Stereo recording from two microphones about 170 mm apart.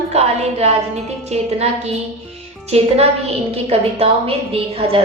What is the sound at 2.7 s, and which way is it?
A woman's voice, 40° right (ahead or behind).